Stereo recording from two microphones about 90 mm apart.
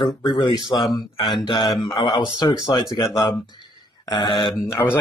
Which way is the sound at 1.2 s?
55° left (ahead or behind).